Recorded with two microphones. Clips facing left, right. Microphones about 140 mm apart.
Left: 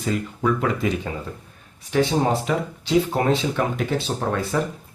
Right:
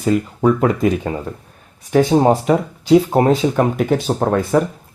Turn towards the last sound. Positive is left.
turn(degrees=-45)  # may be behind; listen again after turning